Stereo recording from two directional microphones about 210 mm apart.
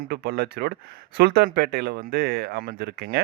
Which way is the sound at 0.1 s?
50° right (ahead or behind).